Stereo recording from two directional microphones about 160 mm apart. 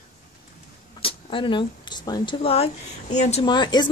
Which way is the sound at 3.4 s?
25° left (ahead or behind).